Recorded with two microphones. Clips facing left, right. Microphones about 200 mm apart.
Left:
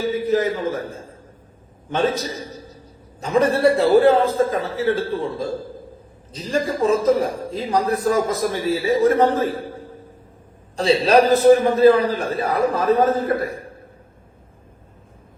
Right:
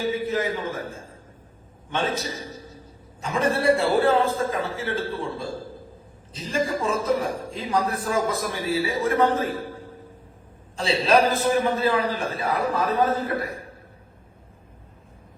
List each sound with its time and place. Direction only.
0.1 s a man's voice: 40° left (ahead or behind)
6.5 s a man's voice: 40° left (ahead or behind)
10.8 s a man's voice: 40° left (ahead or behind)